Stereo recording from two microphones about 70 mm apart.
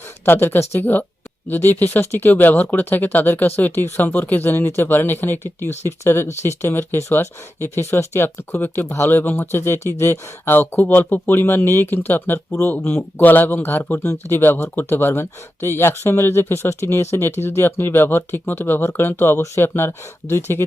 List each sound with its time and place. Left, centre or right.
0.3 s speech: left